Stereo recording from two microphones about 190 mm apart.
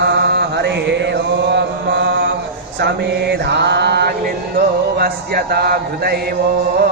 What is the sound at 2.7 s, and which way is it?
Mantra, 65° right (ahead or behind).